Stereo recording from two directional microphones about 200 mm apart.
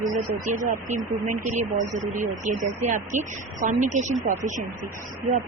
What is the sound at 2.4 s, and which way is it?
A woman's voice, 40° right (ahead or behind).